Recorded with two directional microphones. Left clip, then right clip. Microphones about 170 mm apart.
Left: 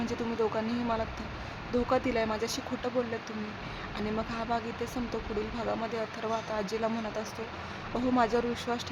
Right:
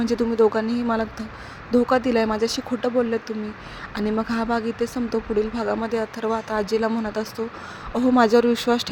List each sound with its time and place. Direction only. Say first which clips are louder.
0.0 s speech: right 12 dB; 35° right (ahead or behind)